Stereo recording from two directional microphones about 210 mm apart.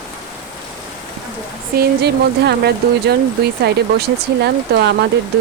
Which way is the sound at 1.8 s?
50° right (ahead or behind).